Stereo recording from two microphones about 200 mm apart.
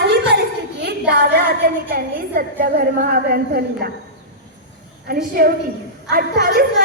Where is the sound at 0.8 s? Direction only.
55° right (ahead or behind).